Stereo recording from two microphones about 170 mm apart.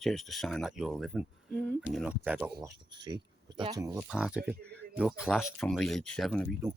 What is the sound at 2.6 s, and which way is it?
Speech, 25° right (ahead or behind).